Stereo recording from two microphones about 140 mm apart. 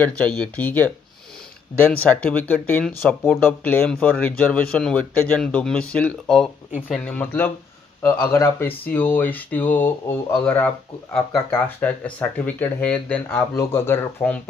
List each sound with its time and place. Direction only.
0.0 s speech: 10° left (ahead or behind)
11.8 s speech: 10° left (ahead or behind)